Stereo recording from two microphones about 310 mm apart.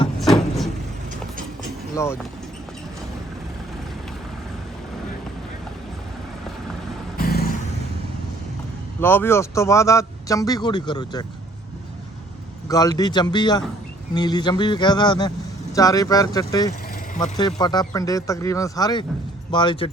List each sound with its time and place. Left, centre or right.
0.2 s a sound: centre
7.2 s vehicle: left
9.0 s a man's voice: centre
12.6 s a man's voice: centre